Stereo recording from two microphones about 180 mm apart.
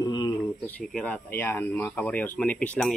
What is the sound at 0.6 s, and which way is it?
Speech, 5° left (ahead or behind).